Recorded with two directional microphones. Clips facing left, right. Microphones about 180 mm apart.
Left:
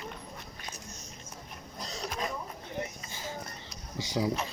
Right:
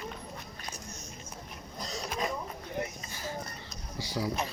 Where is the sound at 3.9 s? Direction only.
20° left (ahead or behind).